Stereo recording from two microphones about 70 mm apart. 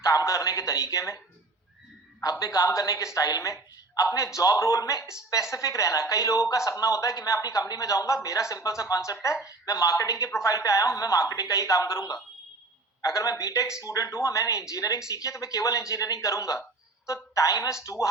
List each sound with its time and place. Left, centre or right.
0.0 s a man's voice: left
2.4 s a man's voice: left